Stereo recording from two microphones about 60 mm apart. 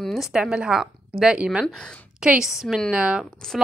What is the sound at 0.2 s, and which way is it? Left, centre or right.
Speech, centre.